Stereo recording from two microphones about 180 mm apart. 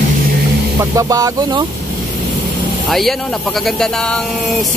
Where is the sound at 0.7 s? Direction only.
20° right (ahead or behind).